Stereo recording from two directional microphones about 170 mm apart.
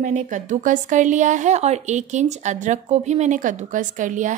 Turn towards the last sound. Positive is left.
turn(degrees=-50)  # may be behind; listen again after turning